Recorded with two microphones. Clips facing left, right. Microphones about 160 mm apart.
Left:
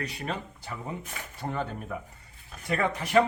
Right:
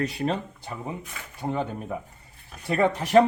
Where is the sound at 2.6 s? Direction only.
30° right (ahead or behind).